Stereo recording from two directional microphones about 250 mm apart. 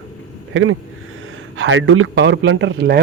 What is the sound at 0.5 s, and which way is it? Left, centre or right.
A man's voice, right.